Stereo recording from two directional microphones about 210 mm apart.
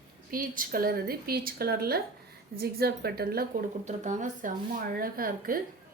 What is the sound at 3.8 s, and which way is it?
A woman's voice, 35° right (ahead or behind).